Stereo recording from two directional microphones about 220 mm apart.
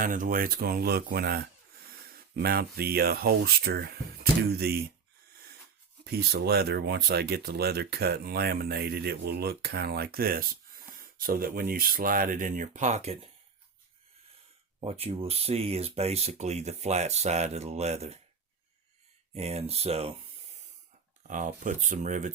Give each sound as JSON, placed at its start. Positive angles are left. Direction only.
{"t": 0.0, "sound": "speech", "side_deg": -40}
{"t": 6.1, "sound": "speech", "side_deg": -45}
{"t": 14.8, "sound": "speech", "side_deg": -25}
{"t": 19.3, "sound": "speech", "side_deg": -30}
{"t": 21.2, "sound": "speech", "side_deg": -35}